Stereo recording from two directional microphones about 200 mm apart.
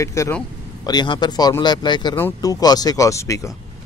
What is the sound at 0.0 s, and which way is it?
Speech, 15° left (ahead or behind).